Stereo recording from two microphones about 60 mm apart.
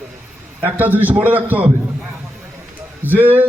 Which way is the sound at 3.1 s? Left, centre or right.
Right.